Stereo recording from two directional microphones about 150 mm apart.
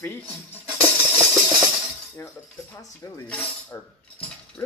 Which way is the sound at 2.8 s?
25° left (ahead or behind).